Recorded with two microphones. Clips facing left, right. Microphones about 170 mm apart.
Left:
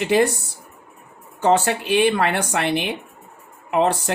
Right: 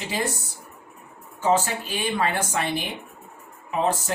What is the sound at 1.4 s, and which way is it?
Speech, 70° left (ahead or behind).